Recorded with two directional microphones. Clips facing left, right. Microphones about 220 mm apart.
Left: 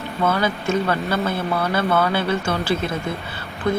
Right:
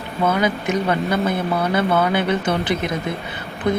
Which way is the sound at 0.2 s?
15° right (ahead or behind).